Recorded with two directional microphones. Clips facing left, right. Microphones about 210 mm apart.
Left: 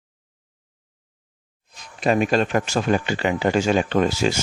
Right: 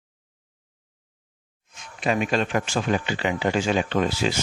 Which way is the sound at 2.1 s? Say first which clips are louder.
Left 4 dB; 40° left (ahead or behind).